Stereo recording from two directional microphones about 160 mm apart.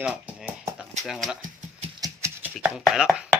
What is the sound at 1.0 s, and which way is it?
Chopping, centre (ahead or behind).